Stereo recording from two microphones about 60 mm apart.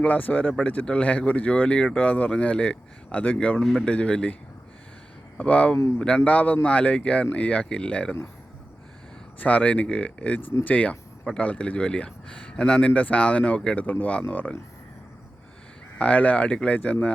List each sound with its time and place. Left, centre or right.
0.0 s speech: left
3.6 s speech: centre
3.8 s speech: centre
5.4 s speech: left
9.4 s speech: left
16.0 s speech: left